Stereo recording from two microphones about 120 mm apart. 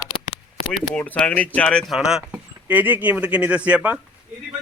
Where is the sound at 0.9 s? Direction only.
10° left (ahead or behind).